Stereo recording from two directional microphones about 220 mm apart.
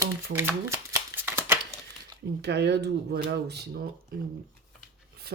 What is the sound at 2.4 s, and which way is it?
Speech, 50° right (ahead or behind).